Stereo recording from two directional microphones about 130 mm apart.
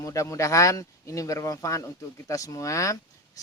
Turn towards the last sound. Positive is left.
turn(degrees=25)  # may be behind; listen again after turning